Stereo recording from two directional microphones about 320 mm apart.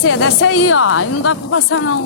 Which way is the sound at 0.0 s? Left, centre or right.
Left.